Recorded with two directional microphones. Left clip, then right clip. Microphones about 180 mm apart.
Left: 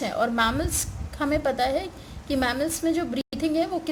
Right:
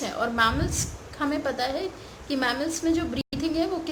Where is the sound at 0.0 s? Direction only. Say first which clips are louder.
Even; 45° left (ahead or behind).